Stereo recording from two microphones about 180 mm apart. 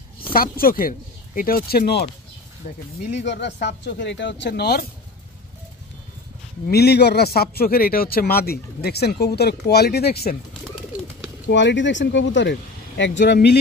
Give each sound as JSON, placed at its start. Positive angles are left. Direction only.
{"t": 0.3, "sound": "speech", "side_deg": 55}
{"t": 3.3, "sound": "speech", "side_deg": 70}
{"t": 6.7, "sound": "a man's voice", "side_deg": 65}
{"t": 11.5, "sound": "speech", "side_deg": 85}